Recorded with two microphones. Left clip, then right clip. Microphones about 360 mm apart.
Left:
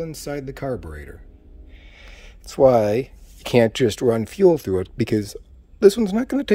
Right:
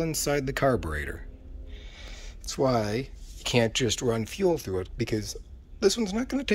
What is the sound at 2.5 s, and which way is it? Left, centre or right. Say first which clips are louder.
Speech: left 11 dB; centre.